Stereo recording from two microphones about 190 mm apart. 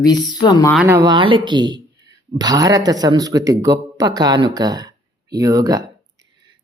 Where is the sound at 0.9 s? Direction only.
15° right (ahead or behind).